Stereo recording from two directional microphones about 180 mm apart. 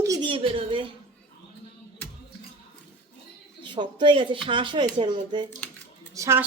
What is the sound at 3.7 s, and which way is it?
A woman's voice, 25° right (ahead or behind).